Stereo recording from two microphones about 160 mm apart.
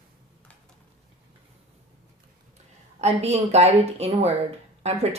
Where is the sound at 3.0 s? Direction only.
40° right (ahead or behind).